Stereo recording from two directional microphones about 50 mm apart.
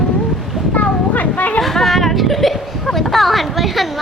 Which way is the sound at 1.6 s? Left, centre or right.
Centre.